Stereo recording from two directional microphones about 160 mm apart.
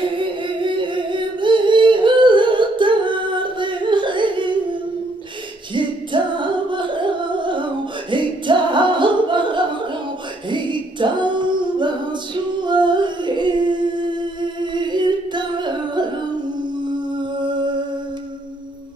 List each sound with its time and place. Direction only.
0.0 s singing: 30° right (ahead or behind)
5.8 s music: 30° right (ahead or behind)
10.5 s singing: 30° right (ahead or behind)